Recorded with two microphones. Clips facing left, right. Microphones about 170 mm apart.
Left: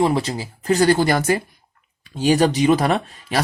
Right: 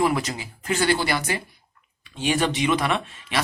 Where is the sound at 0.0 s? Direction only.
30° left (ahead or behind).